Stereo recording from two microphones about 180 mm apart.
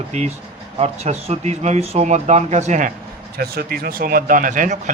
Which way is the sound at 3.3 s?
55° right (ahead or behind).